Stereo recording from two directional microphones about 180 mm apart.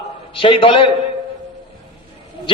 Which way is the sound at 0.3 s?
30° left (ahead or behind).